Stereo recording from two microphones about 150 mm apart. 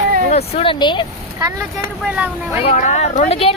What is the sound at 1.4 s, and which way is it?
Speech, 20° right (ahead or behind).